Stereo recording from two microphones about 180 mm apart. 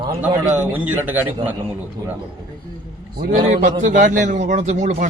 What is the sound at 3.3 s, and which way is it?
A man's voice, 45° right (ahead or behind).